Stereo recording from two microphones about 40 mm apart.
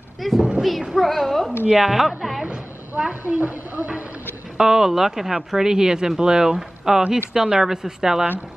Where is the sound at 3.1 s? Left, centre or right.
Right.